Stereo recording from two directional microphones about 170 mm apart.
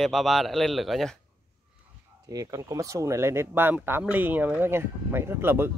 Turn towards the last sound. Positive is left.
turn(degrees=-15)  # may be behind; listen again after turning